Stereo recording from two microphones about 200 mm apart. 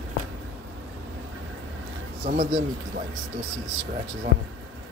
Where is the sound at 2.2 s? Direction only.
35° right (ahead or behind).